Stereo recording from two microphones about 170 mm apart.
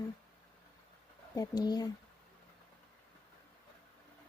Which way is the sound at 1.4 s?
25° left (ahead or behind).